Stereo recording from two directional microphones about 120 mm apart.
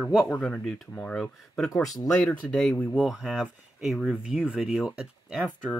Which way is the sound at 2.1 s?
5° left (ahead or behind).